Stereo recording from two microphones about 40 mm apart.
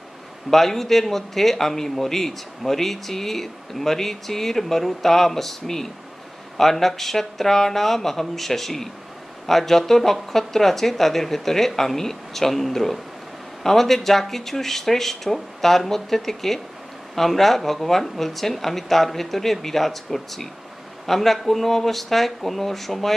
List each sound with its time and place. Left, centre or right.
0.5 s speech: centre